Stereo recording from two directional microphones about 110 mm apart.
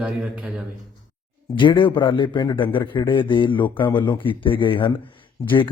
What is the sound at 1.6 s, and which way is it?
Speech, 50° left (ahead or behind).